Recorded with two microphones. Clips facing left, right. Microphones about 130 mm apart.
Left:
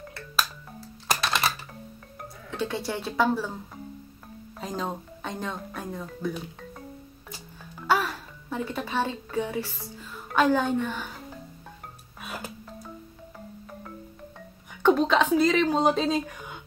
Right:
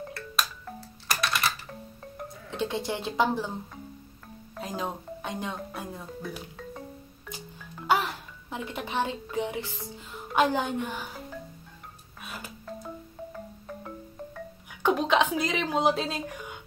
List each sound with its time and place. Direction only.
0.1 s music: centre (ahead or behind)
1.0 s typing: 25° left (ahead or behind)
2.5 s speech: 20° right (ahead or behind)
4.6 s a woman's voice: 5° right (ahead or behind)
7.8 s music: 15° right (ahead or behind)
10.1 s a woman's voice: 15° right (ahead or behind)
14.8 s a woman's voice: 10° right (ahead or behind)